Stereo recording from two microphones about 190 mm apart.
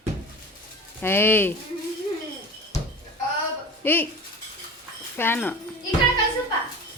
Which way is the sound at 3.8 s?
10° left (ahead or behind).